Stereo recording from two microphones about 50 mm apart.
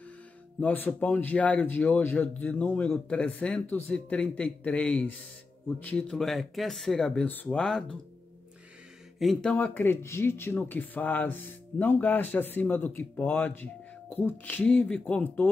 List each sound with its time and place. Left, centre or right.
0.6 s speech: left
2.9 s speech: left
6.1 s speech: centre
9.5 s speech: left
9.8 s speech: left